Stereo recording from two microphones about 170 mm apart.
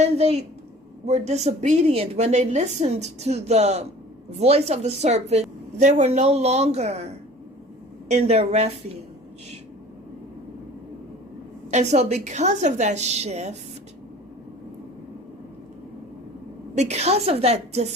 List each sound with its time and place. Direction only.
0.0 s a woman's voice: 40° right (ahead or behind)
11.7 s a woman's voice: 40° right (ahead or behind)
16.7 s a woman's voice: 40° right (ahead or behind)